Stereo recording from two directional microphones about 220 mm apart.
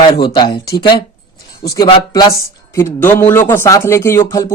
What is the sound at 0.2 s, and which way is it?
Speech, 20° left (ahead or behind).